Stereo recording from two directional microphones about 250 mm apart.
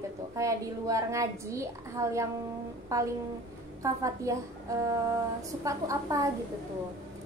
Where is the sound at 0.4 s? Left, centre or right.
Centre.